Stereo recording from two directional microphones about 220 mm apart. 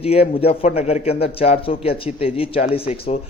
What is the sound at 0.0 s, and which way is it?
Speech, 25° left (ahead or behind).